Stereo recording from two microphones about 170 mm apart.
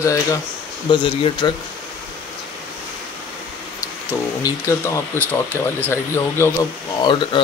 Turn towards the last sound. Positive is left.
turn(degrees=30)  # may be behind; listen again after turning